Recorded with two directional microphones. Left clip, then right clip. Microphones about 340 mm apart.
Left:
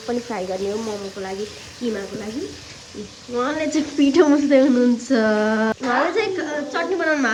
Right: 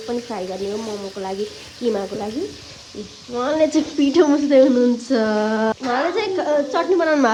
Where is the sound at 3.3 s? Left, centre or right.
Centre.